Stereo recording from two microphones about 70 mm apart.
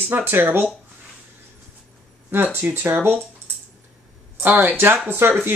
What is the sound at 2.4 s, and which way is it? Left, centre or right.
Speech, right.